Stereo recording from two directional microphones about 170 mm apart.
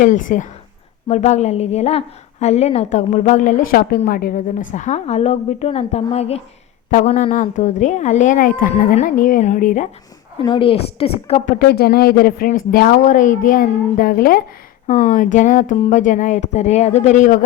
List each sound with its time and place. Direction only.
0.0 s a woman's voice: 50° left (ahead or behind)
10.4 s a woman's voice: 30° left (ahead or behind)
11.6 s speech: 65° left (ahead or behind); by 17.3 s 45° left (ahead or behind)